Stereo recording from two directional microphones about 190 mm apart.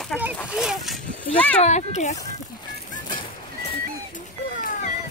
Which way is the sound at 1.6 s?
35° left (ahead or behind).